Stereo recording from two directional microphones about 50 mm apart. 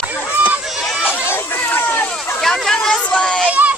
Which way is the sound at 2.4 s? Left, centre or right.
Centre.